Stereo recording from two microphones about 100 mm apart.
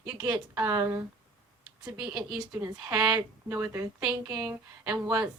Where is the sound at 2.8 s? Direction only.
40° right (ahead or behind).